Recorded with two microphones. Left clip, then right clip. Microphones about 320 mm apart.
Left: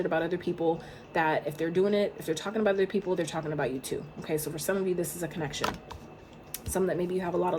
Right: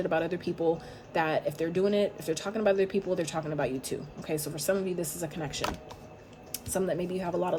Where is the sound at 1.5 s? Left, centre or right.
Right.